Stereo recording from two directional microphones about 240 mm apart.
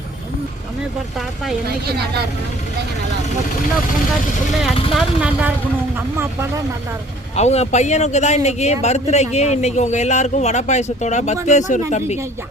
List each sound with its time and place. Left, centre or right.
4.9 s speech: centre
7.3 s a man's voice: left